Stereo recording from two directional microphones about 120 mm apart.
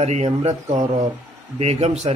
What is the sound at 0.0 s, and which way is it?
Speech, 65° right (ahead or behind).